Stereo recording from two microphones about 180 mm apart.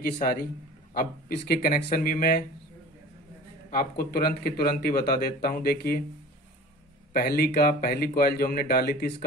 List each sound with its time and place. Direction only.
0.0 s speech: 55° left (ahead or behind)
3.7 s speech: 55° left (ahead or behind)
7.1 s speech: 55° left (ahead or behind)